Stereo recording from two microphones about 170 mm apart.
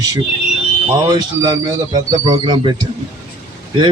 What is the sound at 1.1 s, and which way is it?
A man's voice, 25° right (ahead or behind).